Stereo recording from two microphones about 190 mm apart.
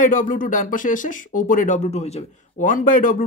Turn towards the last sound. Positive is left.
turn(degrees=45)  # may be behind; listen again after turning